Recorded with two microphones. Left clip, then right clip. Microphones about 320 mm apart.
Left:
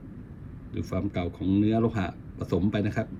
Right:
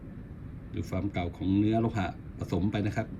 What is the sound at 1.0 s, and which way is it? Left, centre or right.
Speech, centre.